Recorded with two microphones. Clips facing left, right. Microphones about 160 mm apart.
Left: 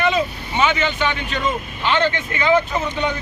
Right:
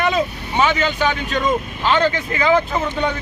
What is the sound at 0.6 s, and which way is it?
Speech, 40° right (ahead or behind).